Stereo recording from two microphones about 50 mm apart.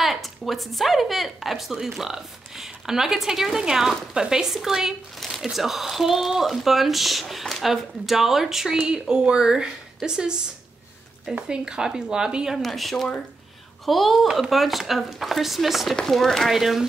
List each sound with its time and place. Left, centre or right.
0.0 s speech: centre
11.4 s speech: centre
12.6 s speech: centre
16.0 s speech: centre